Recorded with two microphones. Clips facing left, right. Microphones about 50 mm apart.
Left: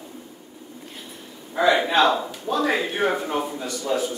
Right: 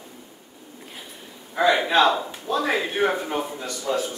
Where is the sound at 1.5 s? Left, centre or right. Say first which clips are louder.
Left 1 dB; centre.